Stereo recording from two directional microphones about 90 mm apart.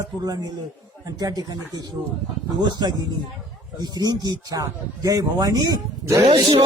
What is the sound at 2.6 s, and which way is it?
Speech, 50° right (ahead or behind).